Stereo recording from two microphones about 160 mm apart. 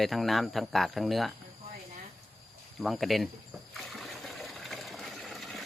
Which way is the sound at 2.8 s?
Centre (ahead or behind).